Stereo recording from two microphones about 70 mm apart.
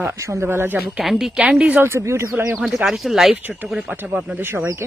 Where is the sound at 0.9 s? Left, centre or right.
Centre.